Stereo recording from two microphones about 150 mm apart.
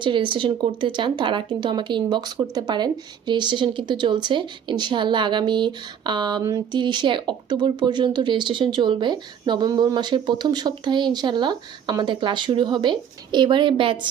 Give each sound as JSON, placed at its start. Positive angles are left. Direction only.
{"t": 0.0, "sound": "speech", "side_deg": -35}